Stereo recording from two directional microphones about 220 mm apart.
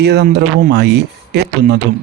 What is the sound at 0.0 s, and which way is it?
Speech, 50° right (ahead or behind).